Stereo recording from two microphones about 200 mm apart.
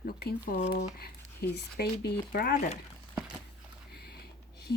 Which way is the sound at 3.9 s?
50° left (ahead or behind).